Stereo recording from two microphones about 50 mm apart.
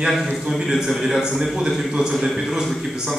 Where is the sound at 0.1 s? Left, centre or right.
Centre.